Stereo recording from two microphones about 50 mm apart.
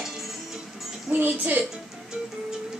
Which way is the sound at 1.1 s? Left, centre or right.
Right.